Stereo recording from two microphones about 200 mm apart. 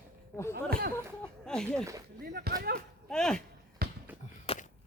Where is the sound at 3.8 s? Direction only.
45° right (ahead or behind).